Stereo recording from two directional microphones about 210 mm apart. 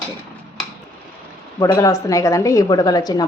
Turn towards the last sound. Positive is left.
turn(degrees=20)  # may be behind; listen again after turning